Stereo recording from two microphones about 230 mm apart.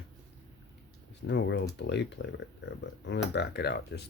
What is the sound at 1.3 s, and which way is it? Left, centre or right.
Speech, left.